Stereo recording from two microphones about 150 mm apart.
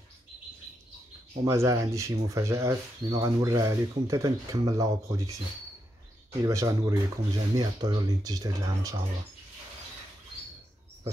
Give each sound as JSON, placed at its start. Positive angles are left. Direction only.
{"t": 1.4, "sound": "speech", "side_deg": -20}
{"t": 6.4, "sound": "speech", "side_deg": -20}